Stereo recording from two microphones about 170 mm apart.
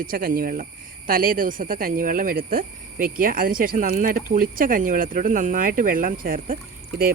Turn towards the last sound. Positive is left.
turn(degrees=-55)  # may be behind; listen again after turning